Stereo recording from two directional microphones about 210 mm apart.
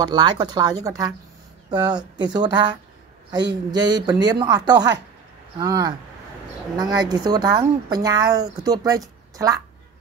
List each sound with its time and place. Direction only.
0.0 s a woman's voice: 20° right (ahead or behind)